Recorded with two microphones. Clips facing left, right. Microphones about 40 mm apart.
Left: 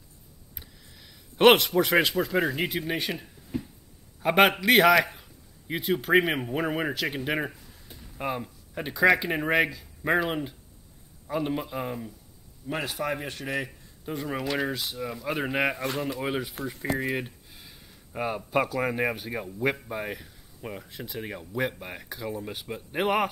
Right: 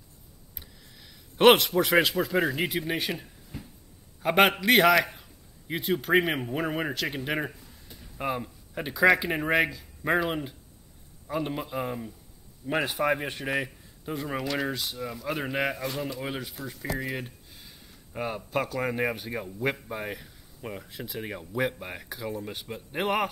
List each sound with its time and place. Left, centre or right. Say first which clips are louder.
0.6 s a man's voice: even; centre
12.6 s speech: right 4 dB; centre
14.0 s speech: left 1 dB; centre